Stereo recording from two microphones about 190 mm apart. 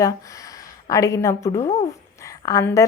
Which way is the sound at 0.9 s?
15° left (ahead or behind).